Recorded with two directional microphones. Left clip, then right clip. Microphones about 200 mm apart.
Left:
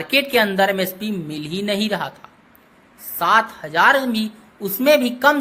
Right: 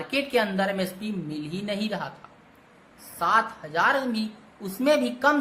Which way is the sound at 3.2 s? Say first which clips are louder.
Left 6 dB; 20° left (ahead or behind).